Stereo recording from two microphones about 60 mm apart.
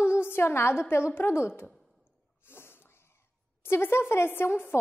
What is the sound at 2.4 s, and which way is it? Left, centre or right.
Snort, left.